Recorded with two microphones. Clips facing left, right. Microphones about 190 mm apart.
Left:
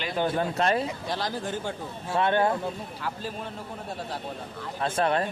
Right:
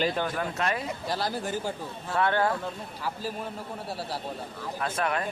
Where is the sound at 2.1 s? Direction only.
20° left (ahead or behind).